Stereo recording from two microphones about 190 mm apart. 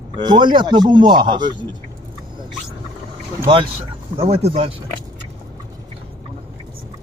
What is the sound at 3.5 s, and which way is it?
A man's voice, 30° right (ahead or behind).